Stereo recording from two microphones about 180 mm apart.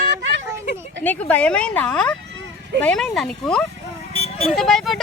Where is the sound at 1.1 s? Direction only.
10° left (ahead or behind).